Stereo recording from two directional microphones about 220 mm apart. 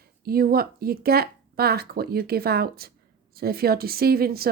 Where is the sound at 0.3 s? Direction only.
40° right (ahead or behind).